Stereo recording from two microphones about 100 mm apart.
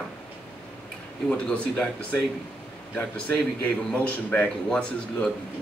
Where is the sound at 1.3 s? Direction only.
15° left (ahead or behind).